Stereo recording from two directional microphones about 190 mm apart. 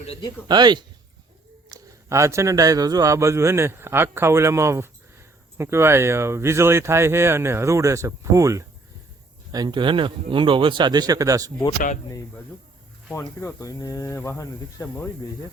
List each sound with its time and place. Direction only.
0.0 s speech: 30° left (ahead or behind)
0.4 s a man's voice: 20° right (ahead or behind)
13.1 s speech: 15° left (ahead or behind)